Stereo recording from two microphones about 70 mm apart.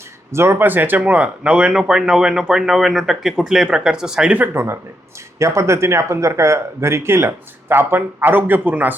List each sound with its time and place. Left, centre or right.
0.3 s speech: right
0.5 s speech: right; by 4.4 s centre
4.5 s speech: right